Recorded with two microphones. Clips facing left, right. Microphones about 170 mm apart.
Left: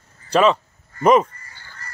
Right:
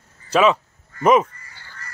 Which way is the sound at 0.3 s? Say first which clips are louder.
Even; 5° right (ahead or behind).